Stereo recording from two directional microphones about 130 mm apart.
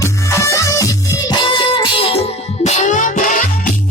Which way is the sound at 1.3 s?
40° left (ahead or behind).